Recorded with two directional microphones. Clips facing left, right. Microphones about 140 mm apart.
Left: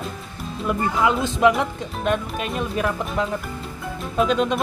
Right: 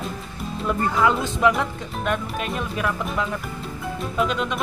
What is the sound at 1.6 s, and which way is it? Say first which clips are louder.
Speech: left 1 dB; 20° left (ahead or behind).